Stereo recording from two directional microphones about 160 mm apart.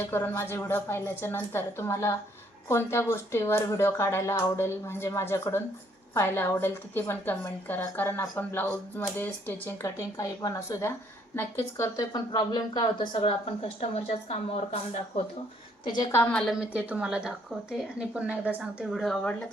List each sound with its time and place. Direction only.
0.0 s a woman's voice: 15° left (ahead or behind)
13.1 s speech: 35° left (ahead or behind)
15.8 s a woman's voice: 25° left (ahead or behind)
16.1 s a woman's voice: 15° left (ahead or behind)
16.5 s speech: 5° right (ahead or behind)